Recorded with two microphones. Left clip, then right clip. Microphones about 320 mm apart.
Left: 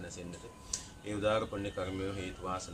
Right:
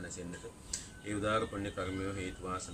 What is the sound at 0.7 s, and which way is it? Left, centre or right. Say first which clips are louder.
Speech: left 1 dB; centre.